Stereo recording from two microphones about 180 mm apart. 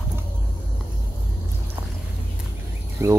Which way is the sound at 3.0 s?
15° right (ahead or behind).